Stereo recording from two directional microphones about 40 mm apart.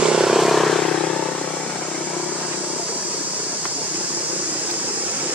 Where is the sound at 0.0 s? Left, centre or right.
Centre.